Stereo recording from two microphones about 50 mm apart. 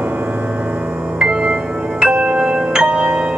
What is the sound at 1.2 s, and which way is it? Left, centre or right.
Music, centre.